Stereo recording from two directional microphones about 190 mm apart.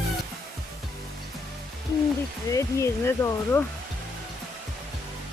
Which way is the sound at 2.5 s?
15° left (ahead or behind).